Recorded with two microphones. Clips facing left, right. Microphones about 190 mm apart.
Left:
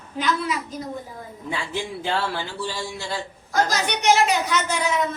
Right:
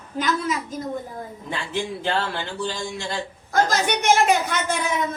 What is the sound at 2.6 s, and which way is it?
Music, 5° left (ahead or behind).